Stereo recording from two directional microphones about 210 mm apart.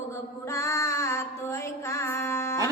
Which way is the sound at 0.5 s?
15° left (ahead or behind).